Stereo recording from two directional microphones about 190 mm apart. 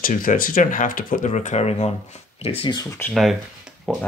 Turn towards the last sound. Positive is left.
turn(degrees=0)  # may be behind; listen again after turning